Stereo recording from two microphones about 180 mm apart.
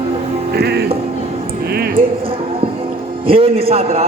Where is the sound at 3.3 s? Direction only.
30° right (ahead or behind).